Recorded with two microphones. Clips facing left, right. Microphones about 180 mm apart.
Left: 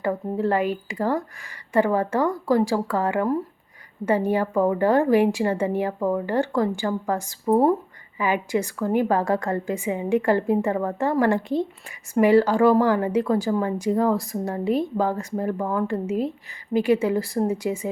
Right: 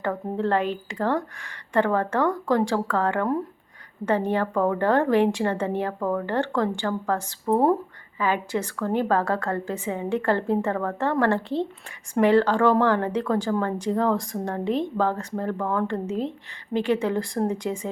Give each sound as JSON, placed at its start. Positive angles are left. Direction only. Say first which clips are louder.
{"t": 0.0, "sound": "speech", "louder": "left 2 dB", "side_deg": 10}